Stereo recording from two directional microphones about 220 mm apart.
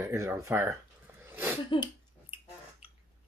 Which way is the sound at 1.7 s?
20° left (ahead or behind).